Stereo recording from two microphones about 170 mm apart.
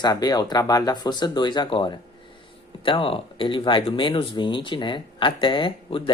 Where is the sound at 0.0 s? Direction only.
25° left (ahead or behind).